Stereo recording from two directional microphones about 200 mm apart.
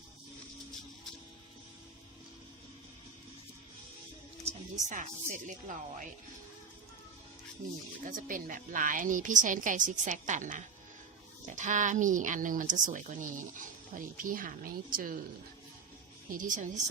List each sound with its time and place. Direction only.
4.4 s speech: 40° right (ahead or behind)
7.6 s speech: 40° right (ahead or behind)
16.3 s speech: 40° right (ahead or behind)